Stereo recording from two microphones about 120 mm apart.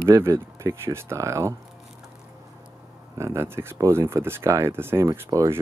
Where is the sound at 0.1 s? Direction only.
20° right (ahead or behind).